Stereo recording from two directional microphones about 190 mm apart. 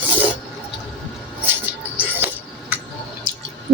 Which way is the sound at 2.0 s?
10° right (ahead or behind).